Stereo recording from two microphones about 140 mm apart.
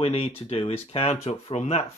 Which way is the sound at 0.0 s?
45° left (ahead or behind).